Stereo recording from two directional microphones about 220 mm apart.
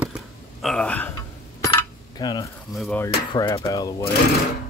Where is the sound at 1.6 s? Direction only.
20° left (ahead or behind).